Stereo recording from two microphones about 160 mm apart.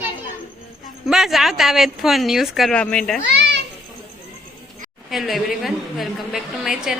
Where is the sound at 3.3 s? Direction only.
90° right.